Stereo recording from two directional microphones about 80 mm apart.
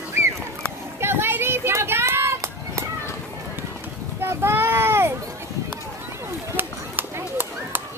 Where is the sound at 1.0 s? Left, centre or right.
Right.